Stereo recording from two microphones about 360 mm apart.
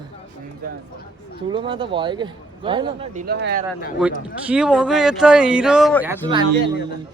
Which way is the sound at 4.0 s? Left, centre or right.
Centre.